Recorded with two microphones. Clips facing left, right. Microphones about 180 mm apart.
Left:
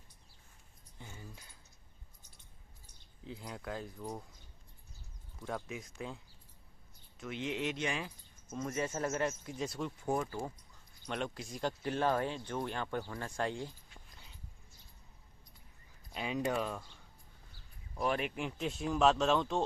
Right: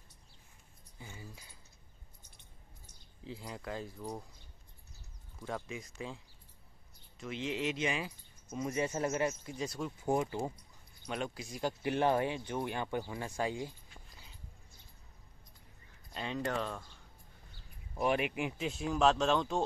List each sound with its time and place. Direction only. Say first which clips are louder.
0.9 s a sound: right 1 dB; 5° right (ahead or behind)
3.3 s speech: right 1 dB; centre (ahead or behind)
5.4 s speech: even; centre (ahead or behind)
8.5 s speech: right 2 dB; 15° right (ahead or behind)
9.3 s speech: even; centre (ahead or behind)
10.0 s speech: right 4 dB; 15° right (ahead or behind)
11.1 s speech: even; 5° right (ahead or behind)
16.1 s speech: left 2 dB; 5° left (ahead or behind)
17.9 s speech: right 3 dB; 15° right (ahead or behind); by 19.6 s centre (ahead or behind)